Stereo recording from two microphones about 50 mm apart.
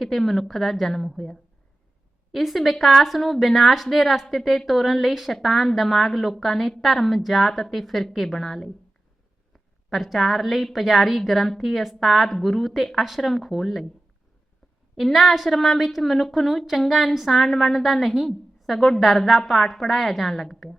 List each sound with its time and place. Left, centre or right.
0.0 s a woman's voice: centre
9.9 s a woman's voice: centre
14.9 s a woman's voice: centre